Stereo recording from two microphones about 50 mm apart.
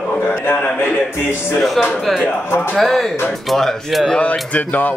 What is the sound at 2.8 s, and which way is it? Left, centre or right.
Music, centre.